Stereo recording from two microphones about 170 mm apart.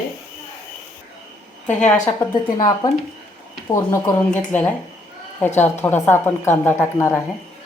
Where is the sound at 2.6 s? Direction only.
20° left (ahead or behind).